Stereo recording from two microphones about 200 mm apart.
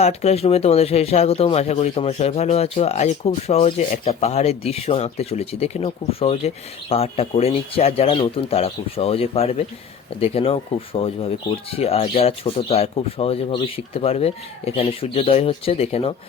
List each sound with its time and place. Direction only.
0.0 s speech: 35° left (ahead or behind)